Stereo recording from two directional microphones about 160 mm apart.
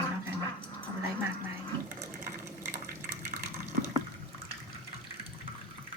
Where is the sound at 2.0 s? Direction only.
15° right (ahead or behind).